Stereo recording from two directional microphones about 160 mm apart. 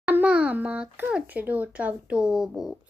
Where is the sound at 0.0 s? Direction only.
10° right (ahead or behind).